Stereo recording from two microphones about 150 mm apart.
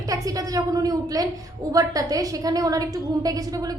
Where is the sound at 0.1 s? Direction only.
20° right (ahead or behind).